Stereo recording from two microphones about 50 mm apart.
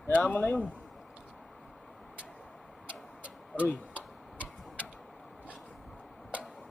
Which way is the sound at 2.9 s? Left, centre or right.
Right.